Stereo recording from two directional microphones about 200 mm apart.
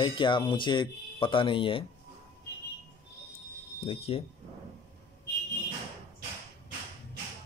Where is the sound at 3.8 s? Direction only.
30° left (ahead or behind).